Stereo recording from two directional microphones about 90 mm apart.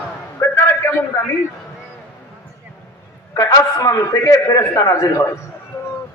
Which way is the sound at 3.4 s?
45° left (ahead or behind).